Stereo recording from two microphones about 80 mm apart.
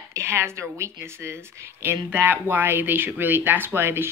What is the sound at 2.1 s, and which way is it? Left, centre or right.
Speech, right.